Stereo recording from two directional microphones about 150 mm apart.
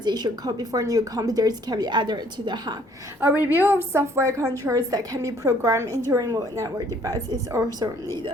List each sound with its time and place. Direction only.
0.0 s a woman's voice: 30° right (ahead or behind)
3.2 s a woman's voice: 15° right (ahead or behind)